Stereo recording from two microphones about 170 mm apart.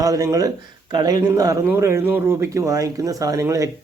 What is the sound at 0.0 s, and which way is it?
Speech, 20° right (ahead or behind).